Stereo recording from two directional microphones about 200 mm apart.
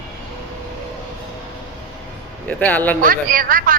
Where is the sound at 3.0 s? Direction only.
45° right (ahead or behind).